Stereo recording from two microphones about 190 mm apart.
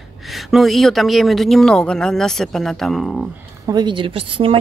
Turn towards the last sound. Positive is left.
turn(degrees=-30)  # may be behind; listen again after turning